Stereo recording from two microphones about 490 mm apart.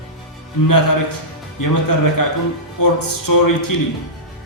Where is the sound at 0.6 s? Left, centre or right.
Left.